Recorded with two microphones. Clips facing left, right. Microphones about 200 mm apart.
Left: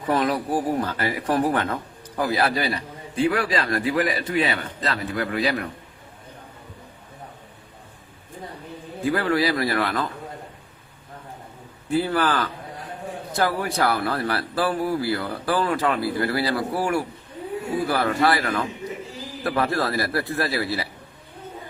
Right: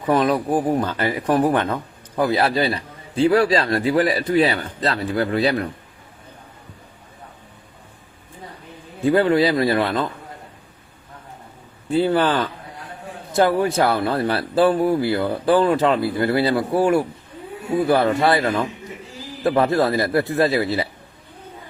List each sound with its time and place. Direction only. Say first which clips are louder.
0.1 s a man's voice: right 4 dB; 20° right (ahead or behind)
9.0 s speech: right 6 dB; 25° right (ahead or behind)
11.9 s speech: right 4 dB; 25° right (ahead or behind)